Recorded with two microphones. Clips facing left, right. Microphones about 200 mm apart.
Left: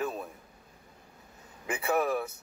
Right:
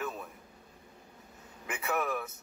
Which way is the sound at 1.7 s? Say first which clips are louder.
Left 5 dB; 30° left (ahead or behind).